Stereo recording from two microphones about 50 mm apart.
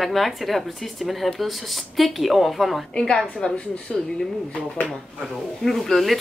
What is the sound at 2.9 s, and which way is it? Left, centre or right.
A woman's voice, centre.